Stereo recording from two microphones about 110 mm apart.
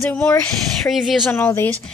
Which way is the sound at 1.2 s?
15° left (ahead or behind).